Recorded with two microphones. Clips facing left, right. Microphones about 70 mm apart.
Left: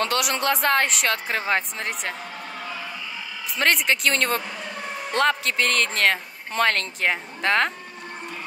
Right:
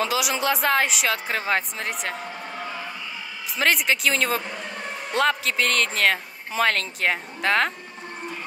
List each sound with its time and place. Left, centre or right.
0.0 s speech: centre
3.5 s speech: centre